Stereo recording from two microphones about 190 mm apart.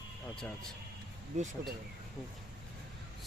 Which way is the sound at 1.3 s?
35° right (ahead or behind).